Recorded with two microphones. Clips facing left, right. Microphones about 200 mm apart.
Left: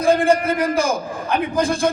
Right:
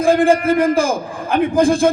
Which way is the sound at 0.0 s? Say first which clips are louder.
Right 3 dB; 50° right (ahead or behind).